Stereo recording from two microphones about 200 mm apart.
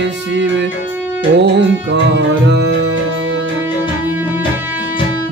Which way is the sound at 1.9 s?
60° right (ahead or behind).